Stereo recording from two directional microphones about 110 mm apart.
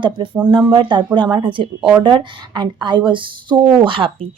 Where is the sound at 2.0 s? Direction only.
45° right (ahead or behind).